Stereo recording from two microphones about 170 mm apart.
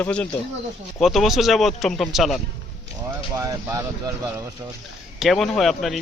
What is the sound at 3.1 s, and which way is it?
A man's voice, 20° right (ahead or behind).